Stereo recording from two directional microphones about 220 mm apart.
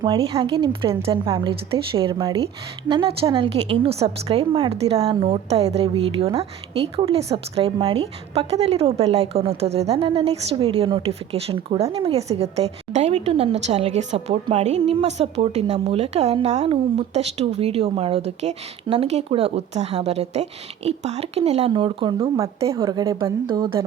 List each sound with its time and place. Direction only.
0.0 s a woman's voice: 25° right (ahead or behind)